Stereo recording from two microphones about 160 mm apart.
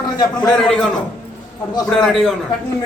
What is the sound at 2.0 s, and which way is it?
Speech, centre (ahead or behind).